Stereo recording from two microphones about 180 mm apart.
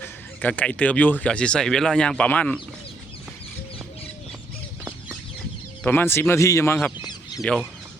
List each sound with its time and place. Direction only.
0.0 s speech: 10° left (ahead or behind)
5.8 s speech: 10° left (ahead or behind)